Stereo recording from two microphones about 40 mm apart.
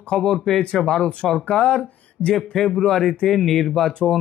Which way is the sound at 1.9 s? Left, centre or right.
Left.